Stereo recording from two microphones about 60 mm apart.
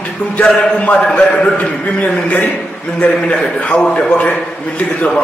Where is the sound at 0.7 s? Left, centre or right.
Left.